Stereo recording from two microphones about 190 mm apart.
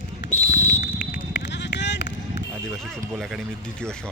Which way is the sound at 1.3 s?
65° left (ahead or behind).